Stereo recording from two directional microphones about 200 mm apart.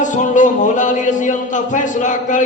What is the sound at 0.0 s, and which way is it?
A man's voice, 40° left (ahead or behind).